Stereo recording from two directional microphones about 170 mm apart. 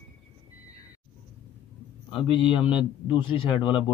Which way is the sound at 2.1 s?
30° left (ahead or behind).